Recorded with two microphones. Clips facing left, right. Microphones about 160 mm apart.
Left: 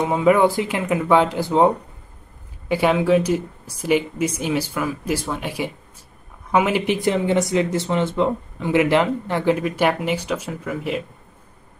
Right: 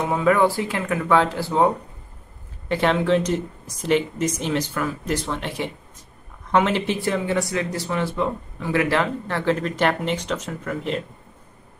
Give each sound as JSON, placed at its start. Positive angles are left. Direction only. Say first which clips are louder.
{"t": 0.0, "sound": "speech", "louder": "left 3 dB", "side_deg": 20}
{"t": 2.7, "sound": "speech", "louder": "left 2 dB", "side_deg": 10}